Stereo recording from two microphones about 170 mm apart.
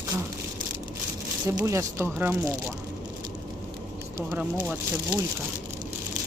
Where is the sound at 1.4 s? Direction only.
15° right (ahead or behind).